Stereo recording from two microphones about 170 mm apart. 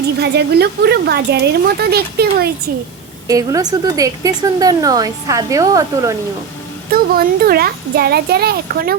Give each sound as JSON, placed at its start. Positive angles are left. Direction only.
{"t": 0.2, "sound": "speech", "side_deg": -75}
{"t": 3.2, "sound": "a woman's voice", "side_deg": -20}
{"t": 6.9, "sound": "a child's voice", "side_deg": -60}